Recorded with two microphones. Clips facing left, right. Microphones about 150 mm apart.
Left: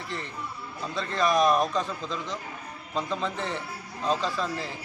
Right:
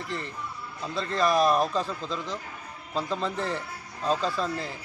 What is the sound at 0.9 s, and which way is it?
A man's voice, centre (ahead or behind).